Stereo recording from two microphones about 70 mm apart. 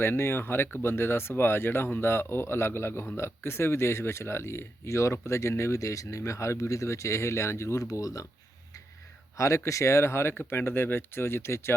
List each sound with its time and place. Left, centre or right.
0.0 s speech: left
9.4 s speech: left